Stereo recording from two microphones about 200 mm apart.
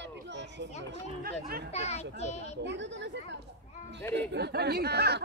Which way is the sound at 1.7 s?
35° left (ahead or behind).